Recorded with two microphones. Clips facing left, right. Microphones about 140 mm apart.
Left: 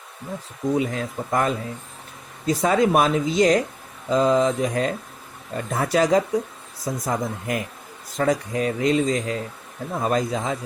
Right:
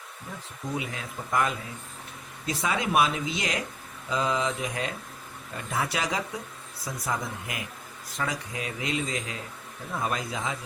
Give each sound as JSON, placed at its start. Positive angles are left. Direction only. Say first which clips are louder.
{"t": 0.8, "sound": "mantra", "louder": "left 10 dB", "side_deg": 40}
{"t": 2.5, "sound": "speech", "louder": "left 9 dB", "side_deg": 45}
{"t": 4.1, "sound": "mantra", "louder": "left 9 dB", "side_deg": 40}
{"t": 5.5, "sound": "speech", "louder": "left 9 dB", "side_deg": 45}
{"t": 10.0, "sound": "mantra", "louder": "left 8 dB", "side_deg": 40}